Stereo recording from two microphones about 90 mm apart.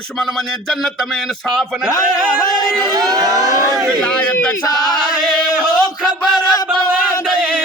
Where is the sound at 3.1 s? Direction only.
40° right (ahead or behind).